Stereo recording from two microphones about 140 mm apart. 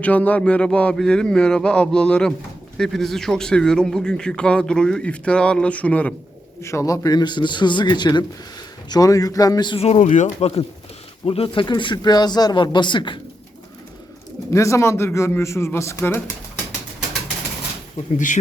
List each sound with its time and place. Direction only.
0.0 s speech: 10° left (ahead or behind)
6.6 s speech: 20° left (ahead or behind)
9.8 s speech: 55° left (ahead or behind); by 13.1 s 35° left (ahead or behind)
14.5 s speech: 20° left (ahead or behind)